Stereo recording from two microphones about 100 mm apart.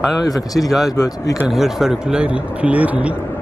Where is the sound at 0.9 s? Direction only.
35° left (ahead or behind).